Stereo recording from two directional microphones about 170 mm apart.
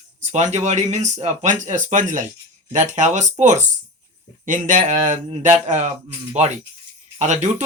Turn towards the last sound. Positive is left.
turn(degrees=-45)  # may be behind; listen again after turning